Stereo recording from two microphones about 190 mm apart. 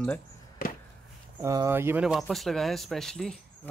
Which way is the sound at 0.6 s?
45° left (ahead or behind).